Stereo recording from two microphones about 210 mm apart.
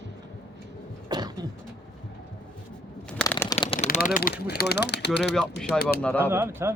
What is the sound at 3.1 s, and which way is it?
Shuffling cards, 10° left (ahead or behind).